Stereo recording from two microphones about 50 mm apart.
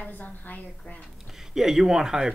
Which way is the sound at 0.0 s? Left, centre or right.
Left.